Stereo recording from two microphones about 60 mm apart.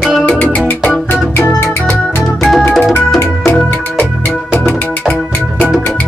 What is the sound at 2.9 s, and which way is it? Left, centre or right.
Music, left.